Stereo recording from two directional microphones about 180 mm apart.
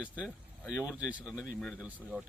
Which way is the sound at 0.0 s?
5° right (ahead or behind).